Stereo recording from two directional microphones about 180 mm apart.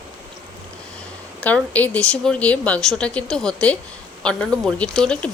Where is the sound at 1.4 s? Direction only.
10° left (ahead or behind).